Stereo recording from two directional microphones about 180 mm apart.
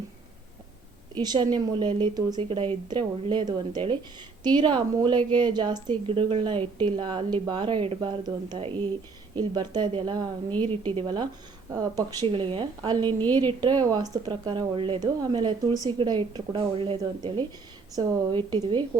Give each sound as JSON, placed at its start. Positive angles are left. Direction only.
{"t": 1.1, "sound": "a woman's voice", "side_deg": -25}
{"t": 10.5, "sound": "a woman's voice", "side_deg": 10}
{"t": 10.9, "sound": "a woman's voice", "side_deg": -25}
{"t": 13.1, "sound": "a woman's voice", "side_deg": 10}
{"t": 13.5, "sound": "a woman's voice", "side_deg": -25}